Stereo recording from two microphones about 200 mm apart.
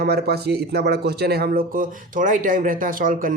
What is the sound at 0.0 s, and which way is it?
Speech, 55° right (ahead or behind).